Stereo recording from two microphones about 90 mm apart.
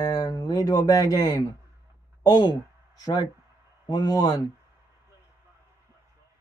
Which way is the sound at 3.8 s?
45° left (ahead or behind).